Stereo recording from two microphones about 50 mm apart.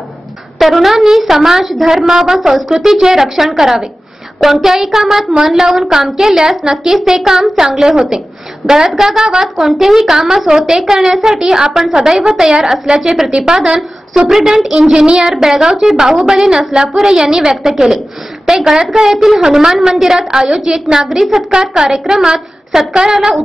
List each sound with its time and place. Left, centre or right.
0.6 s a woman's voice: centre